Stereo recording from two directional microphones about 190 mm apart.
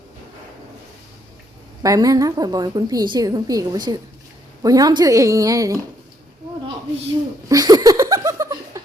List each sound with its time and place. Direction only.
1.8 s a woman's voice: 20° right (ahead or behind)
7.4 s laughter: 20° right (ahead or behind)